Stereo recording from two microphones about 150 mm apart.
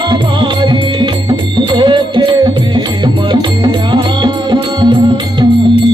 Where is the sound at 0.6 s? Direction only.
30° right (ahead or behind).